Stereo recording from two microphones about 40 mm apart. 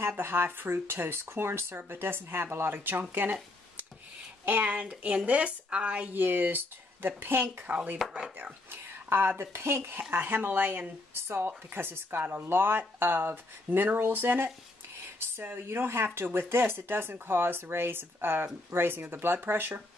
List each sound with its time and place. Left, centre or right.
0.2 s speech: right
0.5 s speech: right
3.0 s speech: right
4.5 s speech: right
6.1 s speech: right
7.7 s speech: right
8.6 s speech: right
10.1 s speech: right
12.3 s speech: right
12.5 s speech: right
15.4 s speech: right